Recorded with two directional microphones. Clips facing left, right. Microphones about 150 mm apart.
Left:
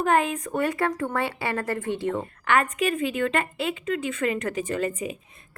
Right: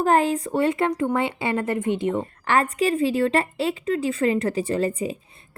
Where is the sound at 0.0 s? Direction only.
35° right (ahead or behind); by 2.2 s 20° right (ahead or behind).